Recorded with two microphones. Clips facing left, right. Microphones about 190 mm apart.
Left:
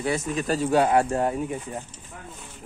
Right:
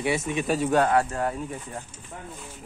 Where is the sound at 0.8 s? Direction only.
20° left (ahead or behind).